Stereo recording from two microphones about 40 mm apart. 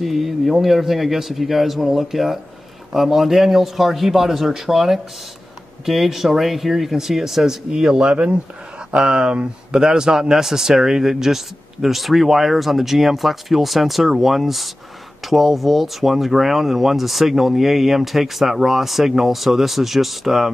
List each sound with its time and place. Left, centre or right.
0.0 s a man's voice: centre
7.7 s a man's voice: centre